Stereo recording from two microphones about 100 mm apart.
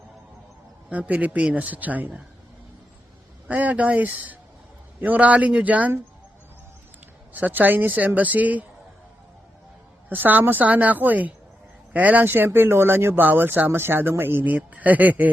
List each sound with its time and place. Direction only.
0.9 s speech: 15° right (ahead or behind)
3.5 s speech: 15° right (ahead or behind)
7.3 s speech: 15° right (ahead or behind)
10.1 s speech: 20° right (ahead or behind)